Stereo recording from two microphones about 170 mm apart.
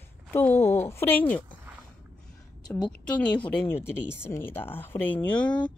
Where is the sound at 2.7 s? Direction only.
5° left (ahead or behind).